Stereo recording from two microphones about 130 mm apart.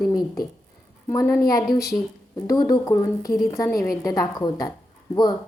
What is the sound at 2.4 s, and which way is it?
A woman's voice, 30° left (ahead or behind).